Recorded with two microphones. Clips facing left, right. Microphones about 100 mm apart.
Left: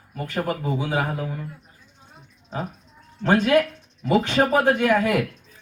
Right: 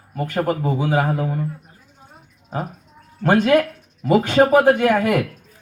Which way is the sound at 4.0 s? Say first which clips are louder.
Right 3 dB; 40° right (ahead or behind).